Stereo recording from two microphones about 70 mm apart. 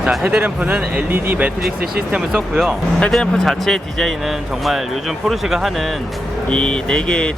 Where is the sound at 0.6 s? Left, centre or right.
Centre.